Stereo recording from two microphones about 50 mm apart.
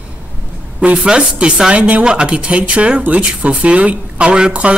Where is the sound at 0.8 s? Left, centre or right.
Right.